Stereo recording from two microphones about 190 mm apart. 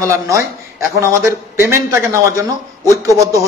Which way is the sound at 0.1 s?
15° right (ahead or behind).